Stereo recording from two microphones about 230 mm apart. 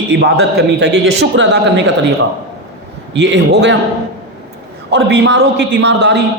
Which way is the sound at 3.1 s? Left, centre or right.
Right.